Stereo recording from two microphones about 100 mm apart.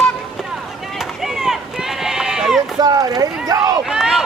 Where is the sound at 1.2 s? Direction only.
5° right (ahead or behind).